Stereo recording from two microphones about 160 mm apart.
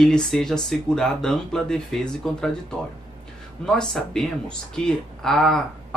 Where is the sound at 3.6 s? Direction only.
5° left (ahead or behind).